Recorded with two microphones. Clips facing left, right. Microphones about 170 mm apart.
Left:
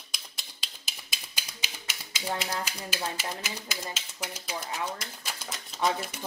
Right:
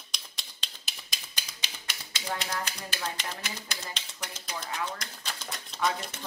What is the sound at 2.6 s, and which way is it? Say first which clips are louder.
Speech: left 2 dB; 5° left (ahead or behind).